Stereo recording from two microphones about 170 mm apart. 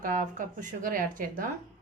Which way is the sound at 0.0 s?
50° right (ahead or behind).